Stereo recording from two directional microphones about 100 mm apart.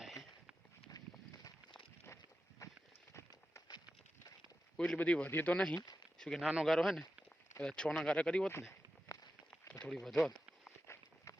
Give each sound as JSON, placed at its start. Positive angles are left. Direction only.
{"t": 0.9, "sound": "run", "side_deg": 40}
{"t": 2.6, "sound": "walk", "side_deg": 35}
{"t": 4.8, "sound": "speech", "side_deg": 10}
{"t": 6.5, "sound": "speech", "side_deg": -10}
{"t": 9.5, "sound": "a sound", "side_deg": 15}
{"t": 9.9, "sound": "speech", "side_deg": 5}
{"t": 10.6, "sound": "walk", "side_deg": 25}